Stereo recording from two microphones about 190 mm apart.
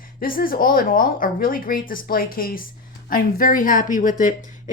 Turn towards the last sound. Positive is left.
turn(degrees=45)  # may be behind; listen again after turning